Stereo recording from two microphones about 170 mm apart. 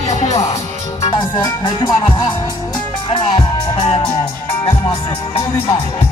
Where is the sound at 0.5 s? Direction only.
20° left (ahead or behind).